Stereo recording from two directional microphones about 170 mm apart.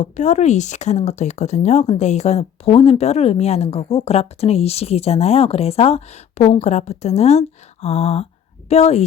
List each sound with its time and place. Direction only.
0.0 s speech: 45° left (ahead or behind)